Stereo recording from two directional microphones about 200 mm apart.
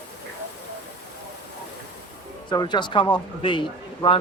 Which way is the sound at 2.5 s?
20° left (ahead or behind).